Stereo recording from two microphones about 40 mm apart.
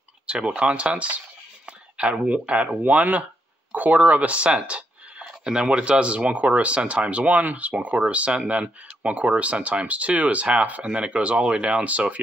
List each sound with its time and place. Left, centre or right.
0.6 s speech: right
2.8 s speech: right